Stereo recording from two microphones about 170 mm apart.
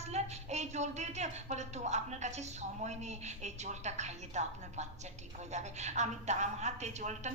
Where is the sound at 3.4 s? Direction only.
40° right (ahead or behind).